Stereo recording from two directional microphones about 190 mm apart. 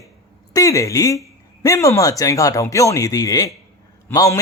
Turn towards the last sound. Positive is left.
turn(degrees=15)  # may be behind; listen again after turning